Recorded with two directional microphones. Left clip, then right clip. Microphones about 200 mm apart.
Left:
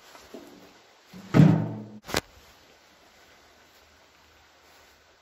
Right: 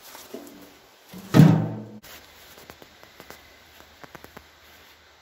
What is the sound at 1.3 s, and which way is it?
Music, 50° right (ahead or behind).